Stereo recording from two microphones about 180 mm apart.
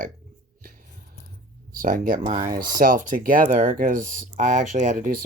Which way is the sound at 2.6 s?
50° right (ahead or behind).